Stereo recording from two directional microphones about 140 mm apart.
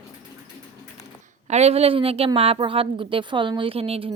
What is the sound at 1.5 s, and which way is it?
A woman's voice, 50° right (ahead or behind).